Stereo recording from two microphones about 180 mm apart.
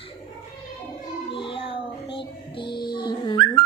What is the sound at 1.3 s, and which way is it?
Music, 30° left (ahead or behind).